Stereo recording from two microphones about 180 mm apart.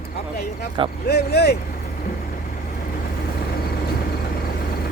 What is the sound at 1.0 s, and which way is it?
Speech, 65° left (ahead or behind).